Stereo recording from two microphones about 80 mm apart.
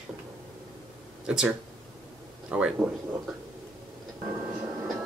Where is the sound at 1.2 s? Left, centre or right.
Centre.